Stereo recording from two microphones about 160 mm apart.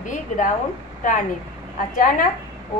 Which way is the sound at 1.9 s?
60° left (ahead or behind).